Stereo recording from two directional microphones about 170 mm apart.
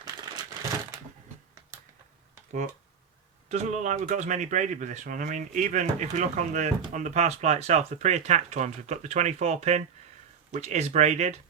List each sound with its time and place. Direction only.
0.3 s crumpling: 25° right (ahead or behind)
3.5 s speech: 45° right (ahead or behind)